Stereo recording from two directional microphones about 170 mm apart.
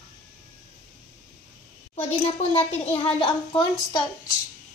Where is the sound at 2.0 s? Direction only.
35° left (ahead or behind).